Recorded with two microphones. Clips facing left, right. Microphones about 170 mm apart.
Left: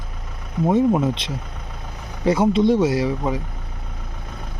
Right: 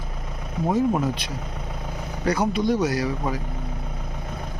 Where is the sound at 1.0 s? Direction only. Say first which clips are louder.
Left 3 dB; 25° left (ahead or behind).